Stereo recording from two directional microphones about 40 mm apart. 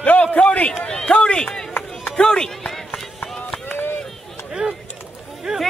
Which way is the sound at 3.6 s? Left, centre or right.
Left.